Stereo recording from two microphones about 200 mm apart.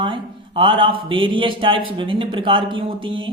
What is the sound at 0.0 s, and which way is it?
A man's voice, 25° right (ahead or behind).